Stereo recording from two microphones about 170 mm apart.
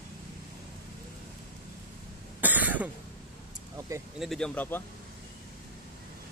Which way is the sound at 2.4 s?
10° right (ahead or behind).